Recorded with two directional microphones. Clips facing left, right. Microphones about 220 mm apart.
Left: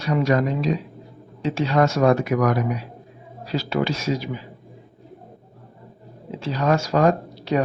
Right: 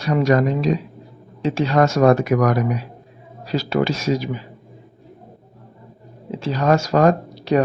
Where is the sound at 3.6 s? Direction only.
45° right (ahead or behind).